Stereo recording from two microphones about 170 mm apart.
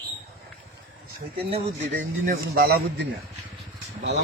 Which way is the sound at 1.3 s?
35° right (ahead or behind).